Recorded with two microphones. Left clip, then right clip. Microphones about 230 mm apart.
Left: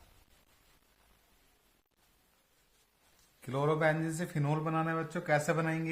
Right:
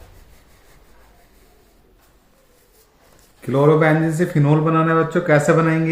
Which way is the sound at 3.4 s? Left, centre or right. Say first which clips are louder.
Right 15 dB; left.